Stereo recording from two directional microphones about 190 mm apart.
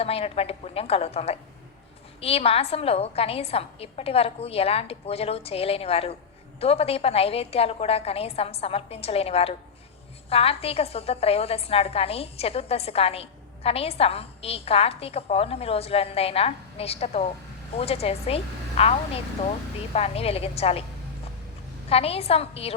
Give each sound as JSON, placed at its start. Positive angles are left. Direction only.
{"t": 0.0, "sound": "a woman's voice", "side_deg": 30}
{"t": 21.8, "sound": "a woman's voice", "side_deg": 30}